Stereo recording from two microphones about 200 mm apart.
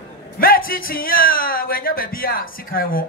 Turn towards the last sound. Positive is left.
turn(degrees=45)  # may be behind; listen again after turning